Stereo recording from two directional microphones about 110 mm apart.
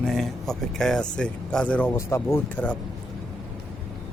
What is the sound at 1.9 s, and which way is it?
Speech, 25° left (ahead or behind).